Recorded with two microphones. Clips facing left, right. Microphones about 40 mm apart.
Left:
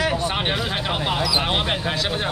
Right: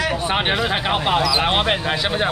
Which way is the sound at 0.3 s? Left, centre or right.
Right.